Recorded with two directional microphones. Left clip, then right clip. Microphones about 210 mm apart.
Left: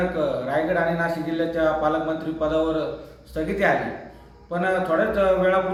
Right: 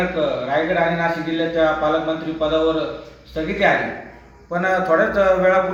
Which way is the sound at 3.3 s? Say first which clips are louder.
Right 4 dB; 5° left (ahead or behind).